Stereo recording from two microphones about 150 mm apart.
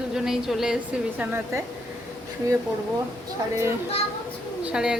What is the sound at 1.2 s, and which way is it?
Speech, 15° right (ahead or behind).